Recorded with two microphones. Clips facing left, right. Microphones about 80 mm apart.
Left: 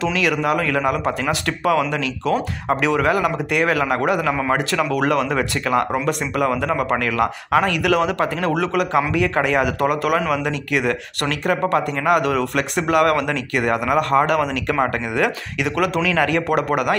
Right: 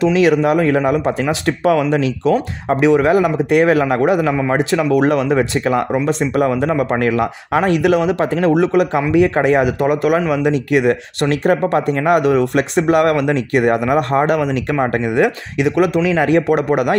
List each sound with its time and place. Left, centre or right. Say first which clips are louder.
0.1 s speech: right 7 dB; right
7.0 s speech: right 4 dB; right